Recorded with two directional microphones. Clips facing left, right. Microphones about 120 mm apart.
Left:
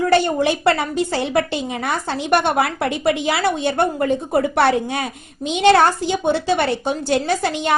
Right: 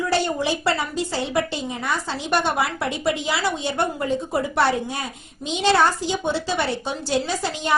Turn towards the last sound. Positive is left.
turn(degrees=60)  # may be behind; listen again after turning